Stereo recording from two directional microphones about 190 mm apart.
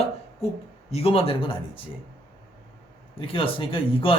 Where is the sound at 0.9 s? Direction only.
30° left (ahead or behind).